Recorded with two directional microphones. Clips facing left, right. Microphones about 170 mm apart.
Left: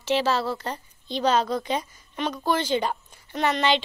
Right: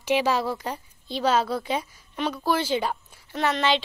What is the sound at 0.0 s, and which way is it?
A woman's voice, 10° right (ahead or behind).